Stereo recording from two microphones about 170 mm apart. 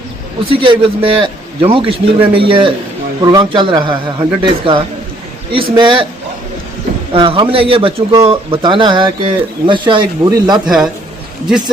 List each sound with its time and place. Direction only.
0.5 s a man's voice: 30° right (ahead or behind)
7.1 s a man's voice: 30° right (ahead or behind)
10.7 s a man's voice: centre (ahead or behind)